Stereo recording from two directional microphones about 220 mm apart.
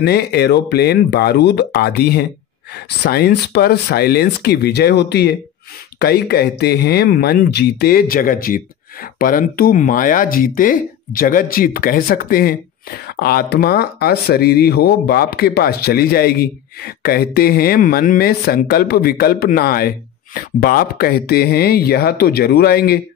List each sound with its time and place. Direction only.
0.0 s speech: 45° left (ahead or behind)